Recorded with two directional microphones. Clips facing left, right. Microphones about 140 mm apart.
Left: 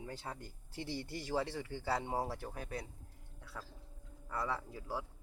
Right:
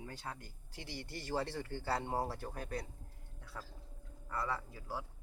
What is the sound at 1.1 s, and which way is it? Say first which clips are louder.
Speech: even; 5° left (ahead or behind).